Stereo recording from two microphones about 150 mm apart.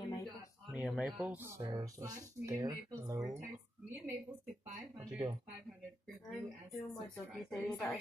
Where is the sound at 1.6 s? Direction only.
25° right (ahead or behind).